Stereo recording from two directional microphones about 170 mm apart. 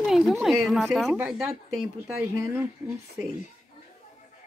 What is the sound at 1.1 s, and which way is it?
A woman's voice, 10° right (ahead or behind).